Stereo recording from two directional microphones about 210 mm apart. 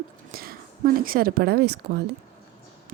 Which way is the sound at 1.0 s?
45° right (ahead or behind).